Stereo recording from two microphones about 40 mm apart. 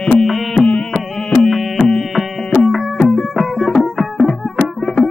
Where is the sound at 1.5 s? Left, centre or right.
Centre.